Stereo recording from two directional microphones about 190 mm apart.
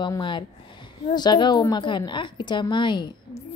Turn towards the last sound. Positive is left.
turn(degrees=25)  # may be behind; listen again after turning